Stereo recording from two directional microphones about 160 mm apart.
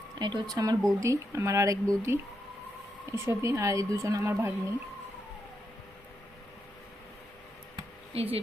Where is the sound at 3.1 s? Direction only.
15° right (ahead or behind).